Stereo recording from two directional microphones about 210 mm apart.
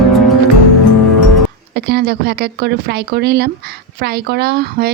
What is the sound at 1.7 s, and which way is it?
A woman's voice, 50° right (ahead or behind).